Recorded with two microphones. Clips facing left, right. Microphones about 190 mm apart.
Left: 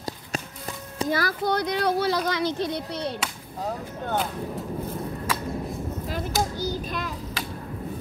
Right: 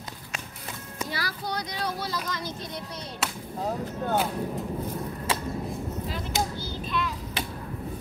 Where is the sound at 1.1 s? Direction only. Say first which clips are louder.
Left 9 dB; 50° left (ahead or behind); by 3.1 s 70° left (ahead or behind).